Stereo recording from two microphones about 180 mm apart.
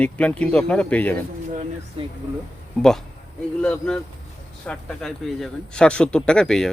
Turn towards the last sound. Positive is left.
turn(degrees=5)  # may be behind; listen again after turning